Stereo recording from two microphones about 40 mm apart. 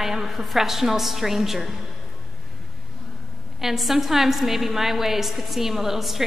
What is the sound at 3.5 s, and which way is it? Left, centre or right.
A woman's voice, centre.